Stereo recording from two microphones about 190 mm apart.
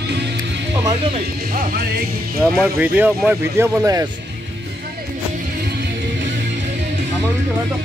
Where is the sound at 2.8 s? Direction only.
10° right (ahead or behind).